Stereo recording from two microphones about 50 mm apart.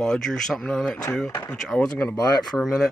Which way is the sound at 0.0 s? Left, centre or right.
Centre.